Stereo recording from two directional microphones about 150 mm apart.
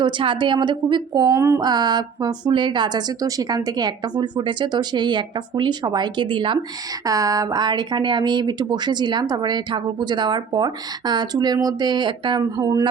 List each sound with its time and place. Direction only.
0.0 s speech: 35° right (ahead or behind)
7.0 s speech: 25° right (ahead or behind)